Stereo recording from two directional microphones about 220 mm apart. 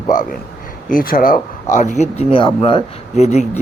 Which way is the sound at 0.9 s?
40° left (ahead or behind).